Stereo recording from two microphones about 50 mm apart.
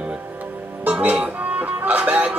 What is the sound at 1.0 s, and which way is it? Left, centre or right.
Music, right.